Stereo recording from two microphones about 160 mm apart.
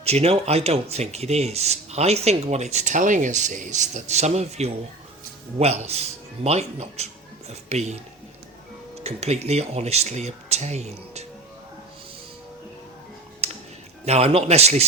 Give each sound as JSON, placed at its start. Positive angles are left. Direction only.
{"t": 0.0, "sound": "speech", "side_deg": -40}
{"t": 9.0, "sound": "speech", "side_deg": -40}
{"t": 14.0, "sound": "speech", "side_deg": -40}